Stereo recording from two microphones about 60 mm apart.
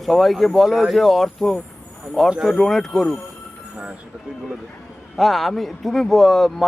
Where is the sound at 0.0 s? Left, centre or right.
Centre.